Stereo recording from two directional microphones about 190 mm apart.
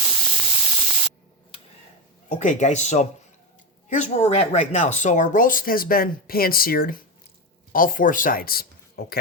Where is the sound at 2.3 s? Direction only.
40° left (ahead or behind).